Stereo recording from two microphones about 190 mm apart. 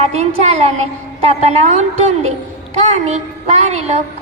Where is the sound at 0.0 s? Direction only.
35° right (ahead or behind).